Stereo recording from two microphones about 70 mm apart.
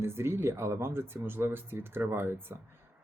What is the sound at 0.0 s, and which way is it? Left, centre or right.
Speech, right.